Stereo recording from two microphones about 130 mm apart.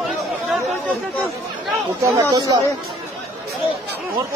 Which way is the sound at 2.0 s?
25° right (ahead or behind).